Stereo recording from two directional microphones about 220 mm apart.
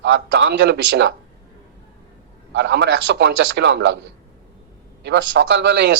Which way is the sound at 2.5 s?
50° right (ahead or behind).